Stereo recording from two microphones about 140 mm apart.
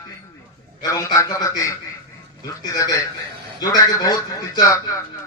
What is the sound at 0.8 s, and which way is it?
A man's voice, 25° left (ahead or behind).